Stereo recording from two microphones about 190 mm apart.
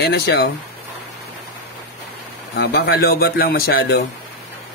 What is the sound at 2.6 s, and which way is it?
Speech, 55° left (ahead or behind).